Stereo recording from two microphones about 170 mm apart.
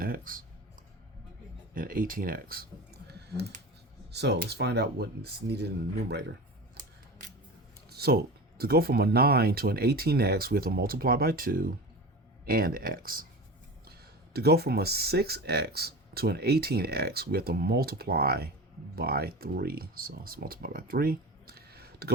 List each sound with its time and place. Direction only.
0.0 s computer keyboard: 55° right (ahead or behind)
1.7 s speech: 55° right (ahead or behind)
4.1 s speech: 80° right
7.9 s speech: 65° right (ahead or behind)